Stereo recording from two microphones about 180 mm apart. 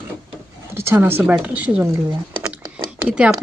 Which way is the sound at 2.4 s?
15° right (ahead or behind).